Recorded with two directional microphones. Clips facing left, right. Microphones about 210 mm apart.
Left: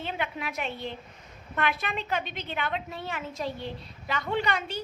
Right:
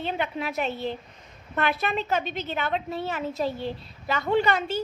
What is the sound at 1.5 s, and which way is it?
A woman's voice, 35° right (ahead or behind).